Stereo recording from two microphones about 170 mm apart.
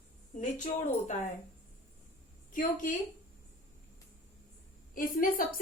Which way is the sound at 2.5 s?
50° left (ahead or behind).